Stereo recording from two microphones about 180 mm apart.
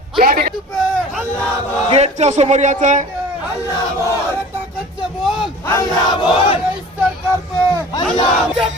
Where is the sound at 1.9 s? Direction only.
40° right (ahead or behind).